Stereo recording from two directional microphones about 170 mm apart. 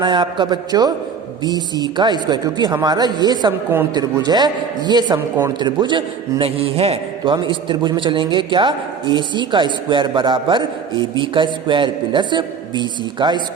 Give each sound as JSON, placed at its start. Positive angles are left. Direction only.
{"t": 0.0, "sound": "a man's voice", "side_deg": -25}